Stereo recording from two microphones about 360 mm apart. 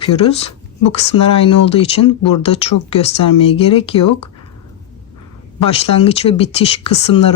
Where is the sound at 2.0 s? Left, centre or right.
Left.